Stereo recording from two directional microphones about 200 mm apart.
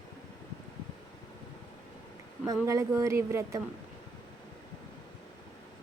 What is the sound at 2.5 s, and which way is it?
Speech, 15° right (ahead or behind).